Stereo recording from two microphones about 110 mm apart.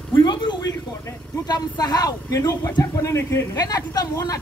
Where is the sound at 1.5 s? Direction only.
35° left (ahead or behind).